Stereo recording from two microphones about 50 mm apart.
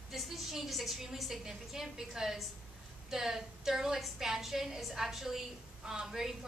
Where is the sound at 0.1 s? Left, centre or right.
Centre.